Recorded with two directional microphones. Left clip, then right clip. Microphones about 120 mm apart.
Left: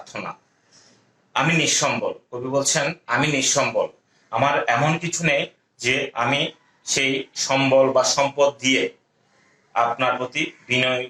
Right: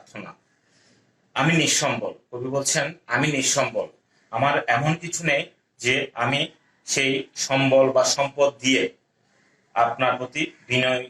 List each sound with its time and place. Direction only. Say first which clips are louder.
0.0 s speech: left 8 dB; 35° left (ahead or behind)